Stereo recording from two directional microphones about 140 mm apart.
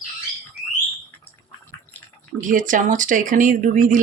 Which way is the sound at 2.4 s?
70° right (ahead or behind).